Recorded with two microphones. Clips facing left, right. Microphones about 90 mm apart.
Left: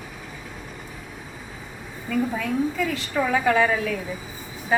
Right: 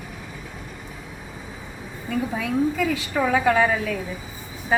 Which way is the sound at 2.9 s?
5° right (ahead or behind).